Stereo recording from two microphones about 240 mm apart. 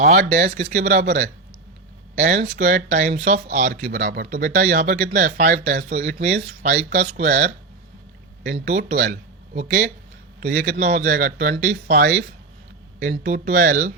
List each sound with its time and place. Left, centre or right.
0.0 s speech: right
8.5 s speech: right